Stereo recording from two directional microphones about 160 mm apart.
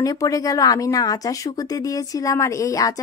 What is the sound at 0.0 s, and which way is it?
Speech, 20° left (ahead or behind).